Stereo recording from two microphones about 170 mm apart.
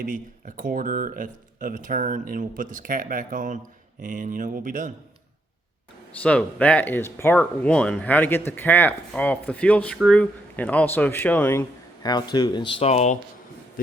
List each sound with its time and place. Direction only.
0.0 s speech: 50° right (ahead or behind)
6.2 s speech: 5° left (ahead or behind)
12.0 s speech: 25° left (ahead or behind)